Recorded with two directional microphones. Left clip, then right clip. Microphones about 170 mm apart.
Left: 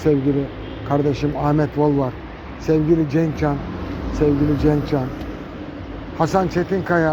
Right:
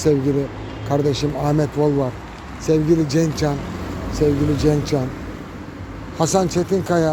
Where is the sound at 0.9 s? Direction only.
25° right (ahead or behind).